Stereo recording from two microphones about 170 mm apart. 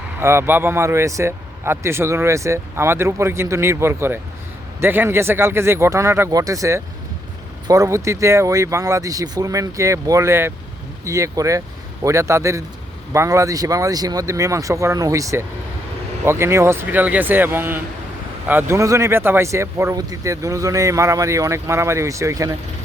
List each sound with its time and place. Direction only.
0.2 s speech: 15° right (ahead or behind)